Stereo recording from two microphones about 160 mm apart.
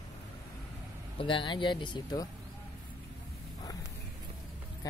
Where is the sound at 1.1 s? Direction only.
30° left (ahead or behind).